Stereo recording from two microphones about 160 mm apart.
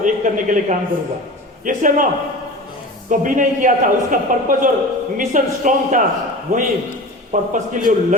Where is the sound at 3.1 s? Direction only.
55° right (ahead or behind).